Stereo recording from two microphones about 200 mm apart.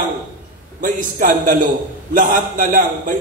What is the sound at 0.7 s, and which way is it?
A man's voice, 40° right (ahead or behind).